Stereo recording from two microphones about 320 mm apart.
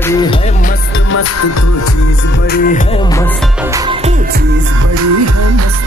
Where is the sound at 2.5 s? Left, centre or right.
Left.